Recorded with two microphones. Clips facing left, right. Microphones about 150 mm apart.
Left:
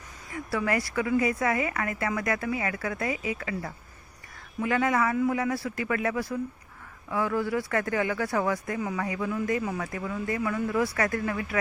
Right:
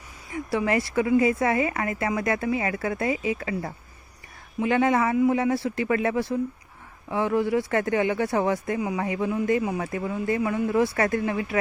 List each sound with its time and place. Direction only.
0.3 s a woman's voice: 20° right (ahead or behind)